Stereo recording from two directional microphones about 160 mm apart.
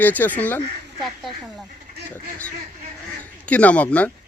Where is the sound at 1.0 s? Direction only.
Centre (ahead or behind).